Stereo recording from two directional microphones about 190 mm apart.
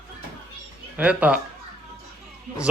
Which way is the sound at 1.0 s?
5° right (ahead or behind).